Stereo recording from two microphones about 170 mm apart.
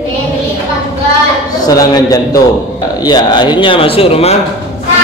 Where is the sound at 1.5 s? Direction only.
20° left (ahead or behind); by 4.4 s 35° left (ahead or behind).